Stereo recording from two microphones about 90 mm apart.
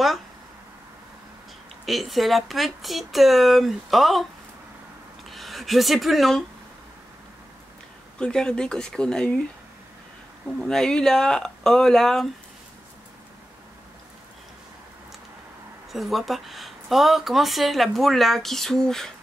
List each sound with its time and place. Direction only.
1.9 s speech: centre (ahead or behind)
5.3 s speech: centre (ahead or behind)
8.2 s speech: 10° left (ahead or behind)
10.6 s speech: 5° left (ahead or behind)
15.9 s speech: centre (ahead or behind)